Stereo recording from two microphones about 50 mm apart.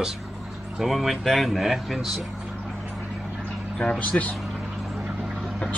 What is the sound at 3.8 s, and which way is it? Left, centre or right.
Speech, left.